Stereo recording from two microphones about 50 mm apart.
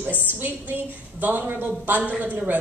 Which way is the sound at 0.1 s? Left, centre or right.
Left.